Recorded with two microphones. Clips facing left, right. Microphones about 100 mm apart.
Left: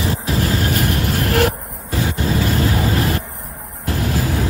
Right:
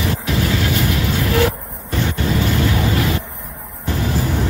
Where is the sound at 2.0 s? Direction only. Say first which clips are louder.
Even; 30° left (ahead or behind).